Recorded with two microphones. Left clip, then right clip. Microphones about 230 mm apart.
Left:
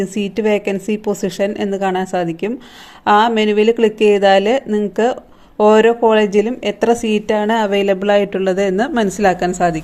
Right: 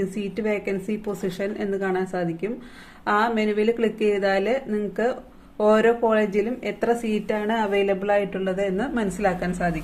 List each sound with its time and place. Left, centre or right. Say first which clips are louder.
0.0 s speech: left 9 dB; left